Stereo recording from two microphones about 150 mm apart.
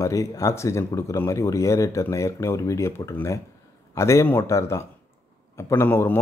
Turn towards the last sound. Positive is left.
turn(degrees=15)  # may be behind; listen again after turning